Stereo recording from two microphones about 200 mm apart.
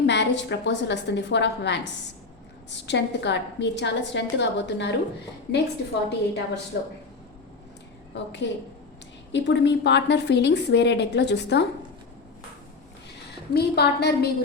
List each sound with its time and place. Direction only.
0.0 s a woman's voice: 60° left (ahead or behind)
8.1 s a woman's voice: 60° left (ahead or behind)
13.5 s a woman's voice: 55° left (ahead or behind)